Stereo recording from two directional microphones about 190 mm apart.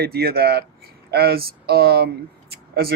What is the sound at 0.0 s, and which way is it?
Speech, 55° right (ahead or behind).